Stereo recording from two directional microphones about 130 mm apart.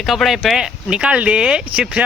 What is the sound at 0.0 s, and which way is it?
Speech, centre (ahead or behind).